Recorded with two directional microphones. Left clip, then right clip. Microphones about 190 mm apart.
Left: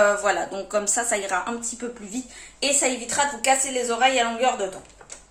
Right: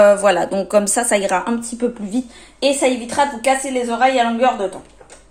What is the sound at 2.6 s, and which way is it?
A woman's voice, 20° right (ahead or behind).